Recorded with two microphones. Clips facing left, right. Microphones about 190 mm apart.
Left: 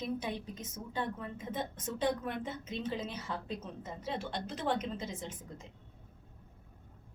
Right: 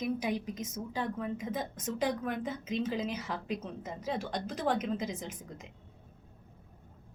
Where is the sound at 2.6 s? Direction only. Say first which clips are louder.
Right 5 dB; 10° right (ahead or behind).